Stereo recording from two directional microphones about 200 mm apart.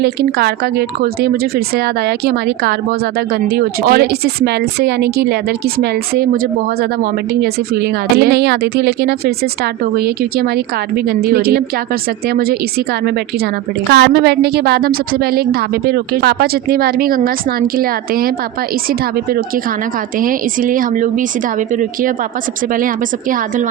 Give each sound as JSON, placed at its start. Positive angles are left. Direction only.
{"t": 0.0, "sound": "a woman's voice", "side_deg": -55}
{"t": 13.9, "sound": "a woman's voice", "side_deg": -55}
{"t": 20.1, "sound": "a woman's voice", "side_deg": -45}